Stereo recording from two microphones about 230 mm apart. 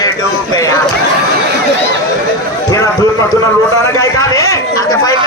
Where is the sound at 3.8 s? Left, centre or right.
Centre.